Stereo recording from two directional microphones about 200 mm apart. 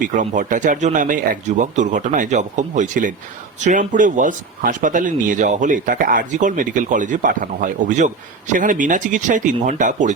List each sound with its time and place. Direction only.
0.0 s speech: 40° right (ahead or behind)